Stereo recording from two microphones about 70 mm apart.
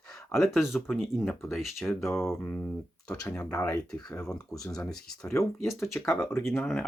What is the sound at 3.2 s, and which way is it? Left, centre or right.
Speech, left.